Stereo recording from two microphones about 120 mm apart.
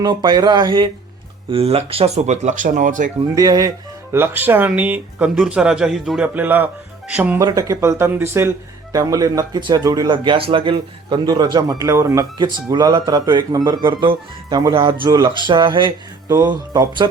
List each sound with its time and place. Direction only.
0.0 s speech: 35° right (ahead or behind)
1.5 s speech: 55° right (ahead or behind); by 3.1 s 90° right
3.3 s speech: 30° right (ahead or behind)
4.1 s speech: 20° right (ahead or behind)
7.4 s speech: 25° right (ahead or behind)
12.7 s speech: 35° right (ahead or behind)
13.7 s speech: 45° right (ahead or behind)